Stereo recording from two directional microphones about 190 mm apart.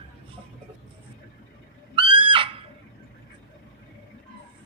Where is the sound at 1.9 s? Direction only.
25° right (ahead or behind).